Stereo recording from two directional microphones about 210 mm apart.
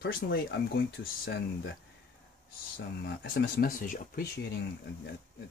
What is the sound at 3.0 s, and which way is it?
Speech, 55° left (ahead or behind).